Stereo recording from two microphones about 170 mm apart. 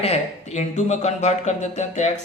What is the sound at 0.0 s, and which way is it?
A man's voice, 40° left (ahead or behind).